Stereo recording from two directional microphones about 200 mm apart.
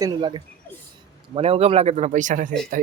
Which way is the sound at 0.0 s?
20° right (ahead or behind).